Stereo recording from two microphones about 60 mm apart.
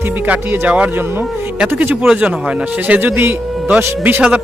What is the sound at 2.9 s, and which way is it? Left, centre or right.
Speech, right.